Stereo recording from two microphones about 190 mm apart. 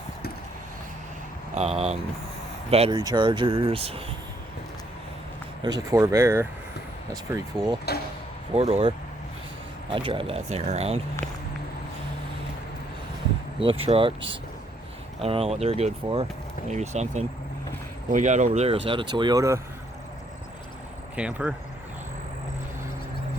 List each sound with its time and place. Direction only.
1.5 s speech: 35° right (ahead or behind)
5.6 s speech: 20° right (ahead or behind)
8.5 s speech: 30° right (ahead or behind)
9.9 s speech: 25° right (ahead or behind)
13.6 s speech: 30° right (ahead or behind)
21.2 s speech: 5° right (ahead or behind)